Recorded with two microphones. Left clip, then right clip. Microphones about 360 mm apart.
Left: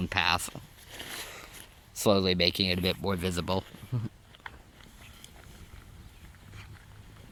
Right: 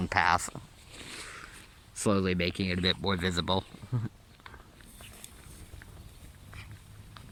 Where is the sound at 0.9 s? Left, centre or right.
Centre.